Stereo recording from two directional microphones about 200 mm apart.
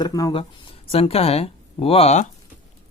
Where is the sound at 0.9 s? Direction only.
30° left (ahead or behind).